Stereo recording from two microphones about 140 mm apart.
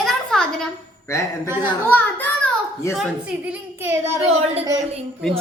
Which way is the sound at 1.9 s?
15° left (ahead or behind).